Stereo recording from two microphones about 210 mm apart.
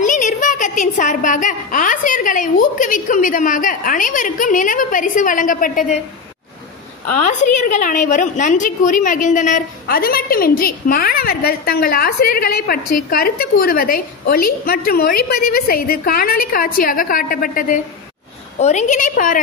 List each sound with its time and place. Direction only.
0.0 s a woman's voice: 35° left (ahead or behind)
7.2 s a woman's voice: 35° left (ahead or behind)